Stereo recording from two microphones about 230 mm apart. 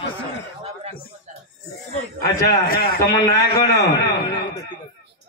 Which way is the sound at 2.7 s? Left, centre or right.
Left.